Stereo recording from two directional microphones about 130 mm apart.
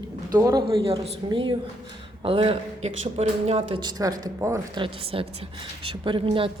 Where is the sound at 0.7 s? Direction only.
45° right (ahead or behind).